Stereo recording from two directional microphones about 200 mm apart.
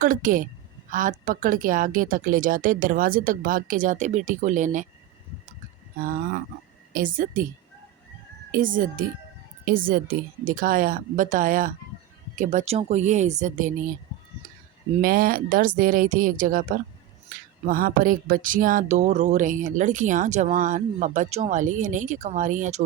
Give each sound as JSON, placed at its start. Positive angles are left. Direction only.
{"t": 0.0, "sound": "a woman's voice", "side_deg": -40}
{"t": 6.0, "sound": "a woman's voice", "side_deg": -45}
{"t": 8.5, "sound": "a woman's voice", "side_deg": -40}
{"t": 15.0, "sound": "a woman's voice", "side_deg": -45}